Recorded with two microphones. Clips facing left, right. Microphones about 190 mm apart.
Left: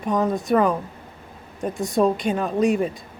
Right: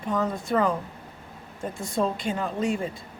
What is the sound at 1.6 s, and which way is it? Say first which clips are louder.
Speech: left 7 dB; 15° left (ahead or behind).